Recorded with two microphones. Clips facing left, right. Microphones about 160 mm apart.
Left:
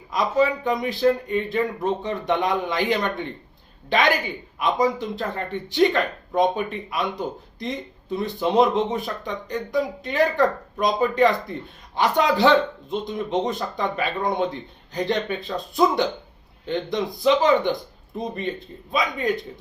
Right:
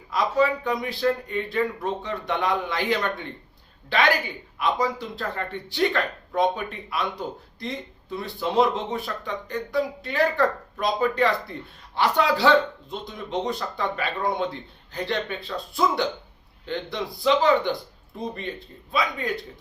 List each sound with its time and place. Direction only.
0.1 s speech: 20° left (ahead or behind)